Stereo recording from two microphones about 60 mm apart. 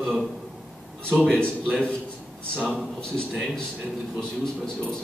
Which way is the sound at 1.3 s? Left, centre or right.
Centre.